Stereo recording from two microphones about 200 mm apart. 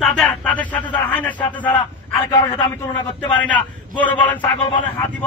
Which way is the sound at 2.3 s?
20° left (ahead or behind).